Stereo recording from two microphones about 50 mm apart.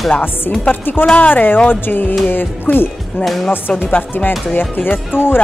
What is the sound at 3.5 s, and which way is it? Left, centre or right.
Speech, left.